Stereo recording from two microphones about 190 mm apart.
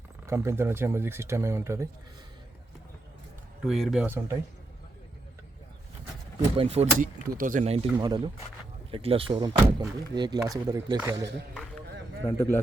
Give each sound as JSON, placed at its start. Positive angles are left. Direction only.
{"t": 0.3, "sound": "speech", "side_deg": -15}
{"t": 3.6, "sound": "speech", "side_deg": 0}
{"t": 6.6, "sound": "speech", "side_deg": -35}
{"t": 7.3, "sound": "speech", "side_deg": -45}
{"t": 12.2, "sound": "a man's voice", "side_deg": 15}